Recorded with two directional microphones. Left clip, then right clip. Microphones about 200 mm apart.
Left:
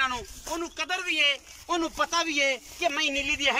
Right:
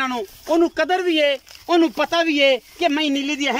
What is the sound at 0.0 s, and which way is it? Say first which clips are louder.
Speech: right 4 dB; 40° right (ahead or behind).